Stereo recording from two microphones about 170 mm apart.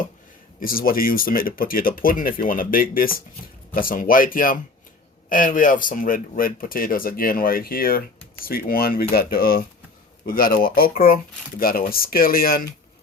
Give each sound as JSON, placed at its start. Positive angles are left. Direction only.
{"t": 0.6, "sound": "speech", "side_deg": 60}